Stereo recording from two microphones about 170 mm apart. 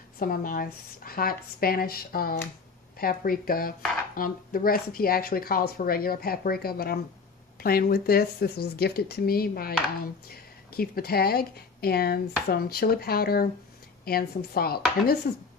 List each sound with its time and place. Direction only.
0.2 s speech: 55° left (ahead or behind)